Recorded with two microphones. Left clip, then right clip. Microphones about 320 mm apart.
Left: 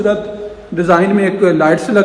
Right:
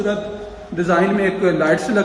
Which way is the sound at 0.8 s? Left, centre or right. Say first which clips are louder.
Left 5 dB; centre.